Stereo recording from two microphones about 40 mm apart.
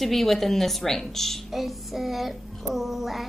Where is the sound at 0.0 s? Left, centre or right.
Centre.